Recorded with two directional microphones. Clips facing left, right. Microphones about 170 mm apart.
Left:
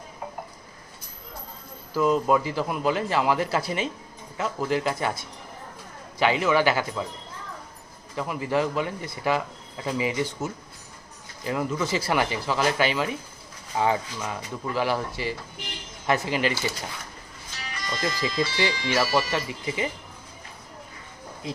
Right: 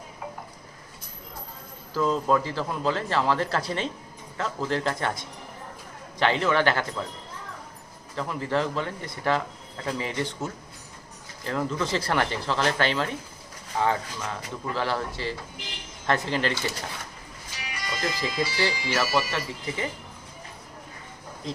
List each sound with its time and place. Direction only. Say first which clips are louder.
1.9 s speech: left 2 dB; 10° left (ahead or behind)
6.1 s speech: left 1 dB; 10° left (ahead or behind)
8.1 s speech: left 1 dB; 10° left (ahead or behind)
17.7 s speech: left 1 dB; 10° right (ahead or behind)
18.9 s speech: left 4 dB; 15° left (ahead or behind)
21.5 s speech: even; 10° left (ahead or behind)